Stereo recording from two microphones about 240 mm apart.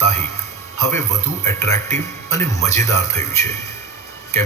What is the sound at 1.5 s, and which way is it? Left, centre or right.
A man's voice, centre.